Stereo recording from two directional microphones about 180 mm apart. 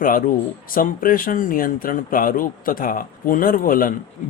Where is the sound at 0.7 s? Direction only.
50° left (ahead or behind).